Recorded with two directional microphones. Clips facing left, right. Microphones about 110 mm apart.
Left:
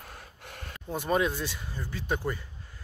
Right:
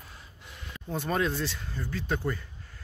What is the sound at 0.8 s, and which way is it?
Speech, 15° left (ahead or behind).